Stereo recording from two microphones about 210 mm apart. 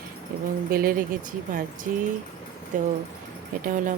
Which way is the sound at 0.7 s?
45° right (ahead or behind).